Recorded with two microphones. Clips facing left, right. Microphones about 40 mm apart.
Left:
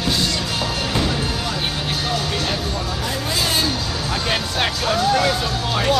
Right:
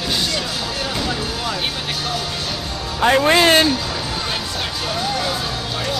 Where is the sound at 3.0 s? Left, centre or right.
Right.